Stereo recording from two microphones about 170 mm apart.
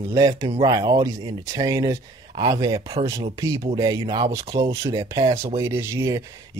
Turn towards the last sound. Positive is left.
turn(degrees=-15)  # may be behind; listen again after turning